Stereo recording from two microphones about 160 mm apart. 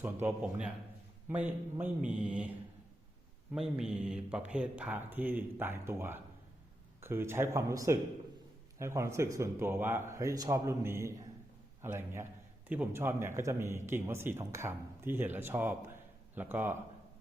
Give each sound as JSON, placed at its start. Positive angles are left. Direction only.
{"t": 0.0, "sound": "a man's voice", "side_deg": -15}
{"t": 3.5, "sound": "a man's voice", "side_deg": -5}